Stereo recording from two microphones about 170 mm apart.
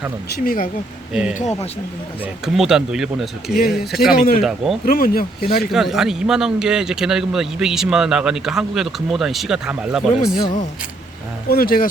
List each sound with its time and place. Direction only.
0.4 s speech: 55° left (ahead or behind)
1.1 s speech: 5° right (ahead or behind)
4.1 s speech: 60° left (ahead or behind)
4.4 s speech: centre (ahead or behind)
4.9 s speech: 60° left (ahead or behind)
5.7 s speech: centre (ahead or behind)
11.4 s speech: 60° left (ahead or behind)